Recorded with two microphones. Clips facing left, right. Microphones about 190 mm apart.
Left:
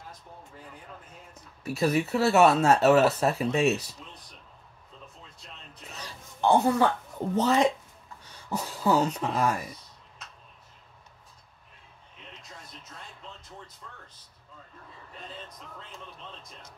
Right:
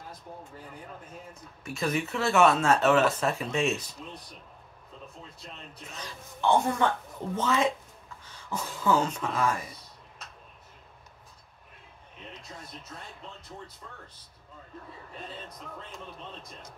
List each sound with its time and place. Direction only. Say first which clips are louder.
1.6 s speech: left 4 dB; 35° left (ahead or behind)
5.9 s speech: left 3 dB; 35° left (ahead or behind)